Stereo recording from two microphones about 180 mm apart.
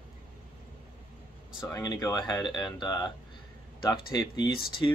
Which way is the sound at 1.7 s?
20° left (ahead or behind).